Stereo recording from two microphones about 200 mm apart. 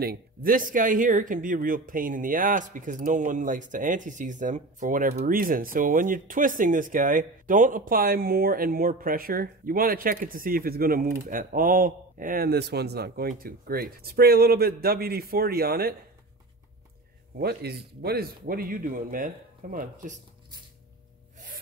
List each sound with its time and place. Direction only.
0.0 s speech: 45° right (ahead or behind)
17.4 s speech: 55° right (ahead or behind)